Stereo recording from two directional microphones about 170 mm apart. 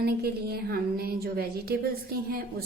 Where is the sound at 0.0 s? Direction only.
70° right (ahead or behind).